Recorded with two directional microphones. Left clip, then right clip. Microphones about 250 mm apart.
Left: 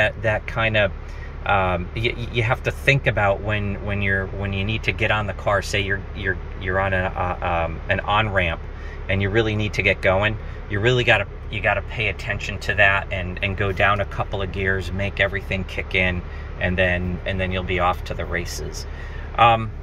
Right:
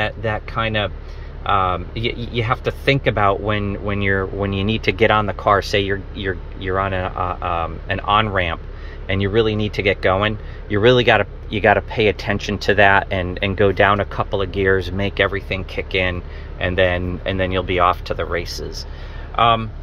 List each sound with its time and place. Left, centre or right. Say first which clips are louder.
0.0 s speech: left 2 dB; centre
11.5 s speech: right 7 dB; right